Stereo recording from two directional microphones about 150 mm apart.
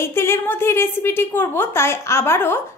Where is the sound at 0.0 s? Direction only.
15° left (ahead or behind).